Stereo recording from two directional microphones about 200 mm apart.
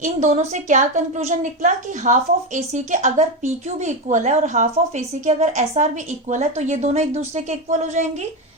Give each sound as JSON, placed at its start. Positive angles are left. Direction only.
{"t": 0.0, "sound": "a woman's voice", "side_deg": -35}